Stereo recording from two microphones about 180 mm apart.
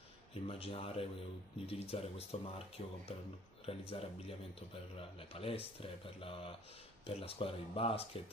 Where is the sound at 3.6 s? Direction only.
30° left (ahead or behind).